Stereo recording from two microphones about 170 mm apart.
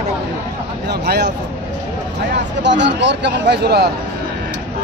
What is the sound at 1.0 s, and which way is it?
Speech, 75° right (ahead or behind).